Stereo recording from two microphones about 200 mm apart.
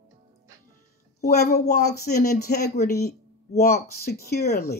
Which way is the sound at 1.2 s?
50° left (ahead or behind).